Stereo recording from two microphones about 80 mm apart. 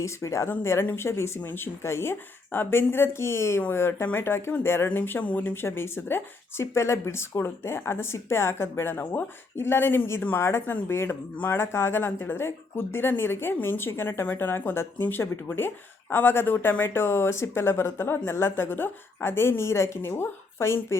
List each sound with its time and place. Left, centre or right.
0.0 s speech: left